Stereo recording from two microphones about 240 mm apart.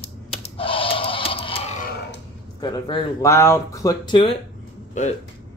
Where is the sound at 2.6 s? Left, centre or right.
Centre.